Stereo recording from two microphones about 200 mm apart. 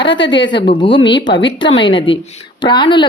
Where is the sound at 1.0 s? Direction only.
60° left (ahead or behind).